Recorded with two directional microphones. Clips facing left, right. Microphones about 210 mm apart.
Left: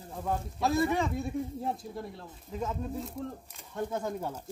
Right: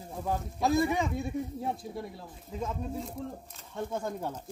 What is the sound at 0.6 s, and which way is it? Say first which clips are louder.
Speech: right 1 dB; 15° right (ahead or behind).